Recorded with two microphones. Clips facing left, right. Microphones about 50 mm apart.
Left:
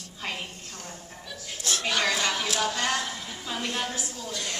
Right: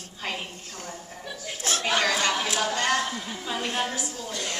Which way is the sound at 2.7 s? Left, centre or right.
Right.